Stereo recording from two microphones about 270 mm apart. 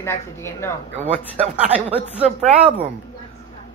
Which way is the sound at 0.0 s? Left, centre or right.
Centre.